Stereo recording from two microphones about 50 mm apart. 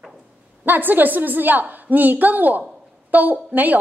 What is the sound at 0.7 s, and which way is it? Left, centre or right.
A woman's voice, right.